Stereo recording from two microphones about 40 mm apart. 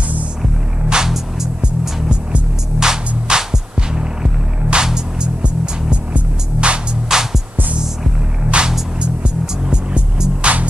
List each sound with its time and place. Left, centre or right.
0.8 s music: centre
2.8 s music: centre
5.4 s music: right
7.1 s music: centre
8.5 s music: right